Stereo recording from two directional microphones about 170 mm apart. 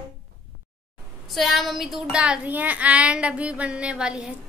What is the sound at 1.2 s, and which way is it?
Speech, centre (ahead or behind).